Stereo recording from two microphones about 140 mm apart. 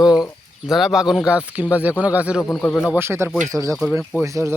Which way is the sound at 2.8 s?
10° right (ahead or behind).